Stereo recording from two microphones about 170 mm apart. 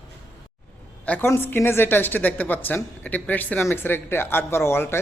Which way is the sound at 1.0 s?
10° left (ahead or behind).